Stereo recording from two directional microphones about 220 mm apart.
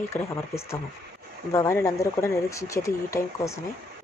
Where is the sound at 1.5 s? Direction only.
15° left (ahead or behind).